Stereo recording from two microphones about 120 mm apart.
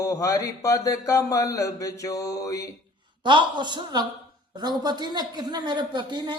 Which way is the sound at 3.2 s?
40° right (ahead or behind).